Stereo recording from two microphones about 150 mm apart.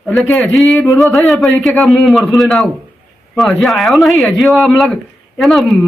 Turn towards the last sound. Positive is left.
turn(degrees=0)  # may be behind; listen again after turning